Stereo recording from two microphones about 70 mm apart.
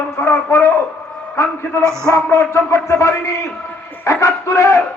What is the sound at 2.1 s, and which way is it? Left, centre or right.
Music, left.